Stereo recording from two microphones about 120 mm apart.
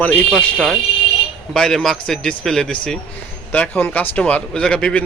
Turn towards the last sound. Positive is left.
turn(degrees=10)  # may be behind; listen again after turning